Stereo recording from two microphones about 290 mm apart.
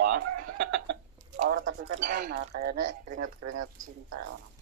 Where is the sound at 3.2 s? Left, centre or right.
Right.